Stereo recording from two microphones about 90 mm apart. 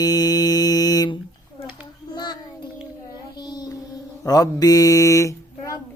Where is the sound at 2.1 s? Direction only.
50° left (ahead or behind).